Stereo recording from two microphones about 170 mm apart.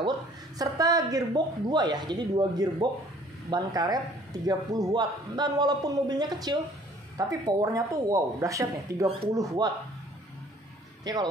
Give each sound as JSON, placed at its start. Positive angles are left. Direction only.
{"t": 0.6, "sound": "speech", "side_deg": -20}
{"t": 11.1, "sound": "speech", "side_deg": -25}